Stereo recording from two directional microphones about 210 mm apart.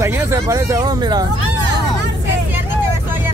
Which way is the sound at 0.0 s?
15° right (ahead or behind).